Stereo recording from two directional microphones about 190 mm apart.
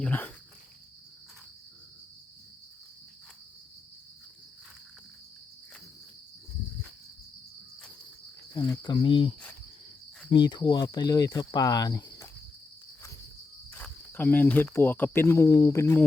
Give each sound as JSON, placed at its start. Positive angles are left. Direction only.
{"t": 0.0, "sound": "speech", "side_deg": 5}
{"t": 8.7, "sound": "speech", "side_deg": 25}
{"t": 13.7, "sound": "cricket", "side_deg": 10}